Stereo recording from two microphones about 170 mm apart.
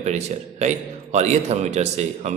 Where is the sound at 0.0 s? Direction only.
40° right (ahead or behind).